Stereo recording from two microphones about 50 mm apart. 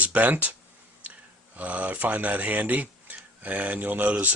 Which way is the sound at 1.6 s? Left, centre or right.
Right.